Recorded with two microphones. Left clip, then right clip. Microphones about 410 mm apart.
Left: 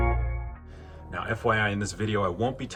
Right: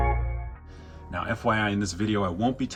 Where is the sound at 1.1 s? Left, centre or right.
Left.